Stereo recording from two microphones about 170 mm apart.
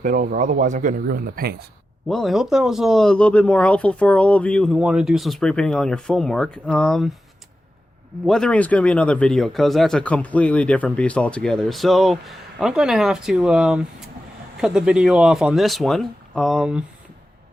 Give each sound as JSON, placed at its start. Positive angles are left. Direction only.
{"t": 0.0, "sound": "speech", "side_deg": -50}
{"t": 2.0, "sound": "speech", "side_deg": 0}
{"t": 8.3, "sound": "speech", "side_deg": 5}